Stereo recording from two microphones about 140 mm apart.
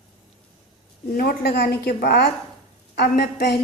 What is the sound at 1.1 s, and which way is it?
A woman's voice, 90° left.